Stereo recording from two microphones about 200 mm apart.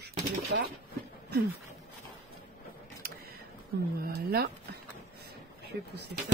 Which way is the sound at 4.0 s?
50° right (ahead or behind).